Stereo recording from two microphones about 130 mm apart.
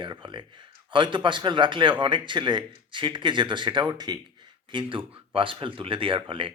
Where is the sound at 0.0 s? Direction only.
35° right (ahead or behind).